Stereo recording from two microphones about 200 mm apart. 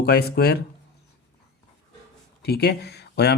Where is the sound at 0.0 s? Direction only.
55° left (ahead or behind).